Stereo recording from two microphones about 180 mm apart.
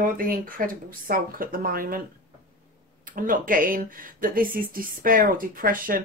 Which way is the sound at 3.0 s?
50° right (ahead or behind).